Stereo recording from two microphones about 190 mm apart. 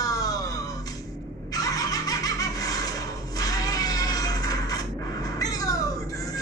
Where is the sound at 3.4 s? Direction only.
20° left (ahead or behind).